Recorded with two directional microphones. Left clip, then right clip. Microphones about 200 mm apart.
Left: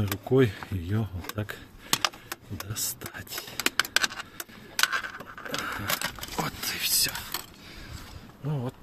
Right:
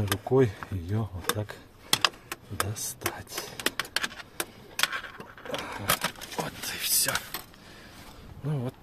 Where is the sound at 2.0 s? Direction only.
10° left (ahead or behind).